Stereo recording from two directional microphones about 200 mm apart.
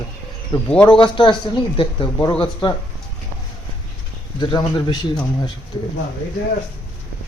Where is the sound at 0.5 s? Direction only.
20° left (ahead or behind).